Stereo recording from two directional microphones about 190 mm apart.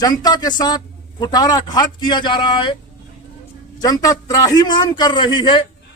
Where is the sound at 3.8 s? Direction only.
20° left (ahead or behind).